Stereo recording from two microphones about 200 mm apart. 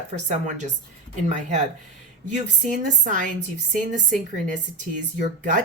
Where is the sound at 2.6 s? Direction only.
40° right (ahead or behind).